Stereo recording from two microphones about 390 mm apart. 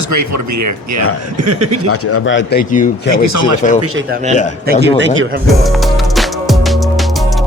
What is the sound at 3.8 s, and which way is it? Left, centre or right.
A man's voice, right.